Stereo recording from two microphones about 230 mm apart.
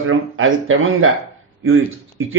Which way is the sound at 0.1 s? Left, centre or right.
Right.